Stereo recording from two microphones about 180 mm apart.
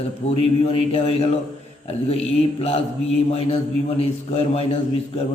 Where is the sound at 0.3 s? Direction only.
35° left (ahead or behind).